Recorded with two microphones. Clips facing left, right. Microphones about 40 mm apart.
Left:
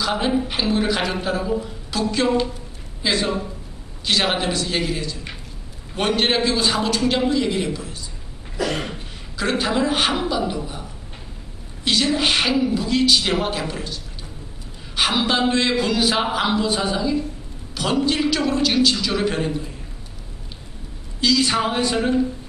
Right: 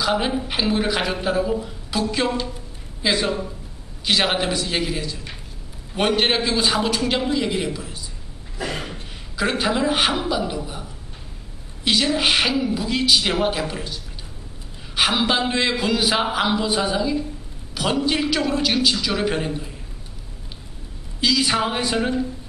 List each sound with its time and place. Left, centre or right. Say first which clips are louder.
0.0 s a woman's voice: left 1 dB; centre
2.2 s a man's voice: left 4 dB; centre
8.5 s cough: left 4 dB; left
8.9 s a sound: even; centre
10.1 s a man's voice: left 1 dB; centre
15.0 s a man's voice: even; centre
21.2 s a man's voice: left 1 dB; centre